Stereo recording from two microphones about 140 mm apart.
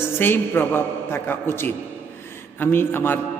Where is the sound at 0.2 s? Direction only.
15° left (ahead or behind).